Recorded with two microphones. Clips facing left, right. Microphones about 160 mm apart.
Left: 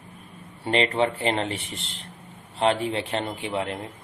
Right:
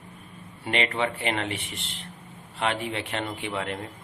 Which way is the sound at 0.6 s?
35° left (ahead or behind).